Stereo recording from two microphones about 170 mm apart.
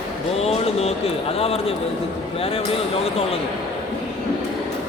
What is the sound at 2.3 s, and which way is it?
Speech, 35° left (ahead or behind).